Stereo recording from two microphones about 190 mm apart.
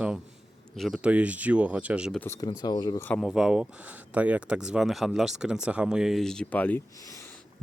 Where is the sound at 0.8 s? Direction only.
5° right (ahead or behind).